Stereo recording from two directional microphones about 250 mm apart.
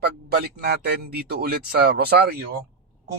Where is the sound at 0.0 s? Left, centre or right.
Right.